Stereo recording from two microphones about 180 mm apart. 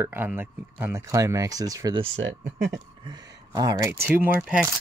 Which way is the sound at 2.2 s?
70° right (ahead or behind).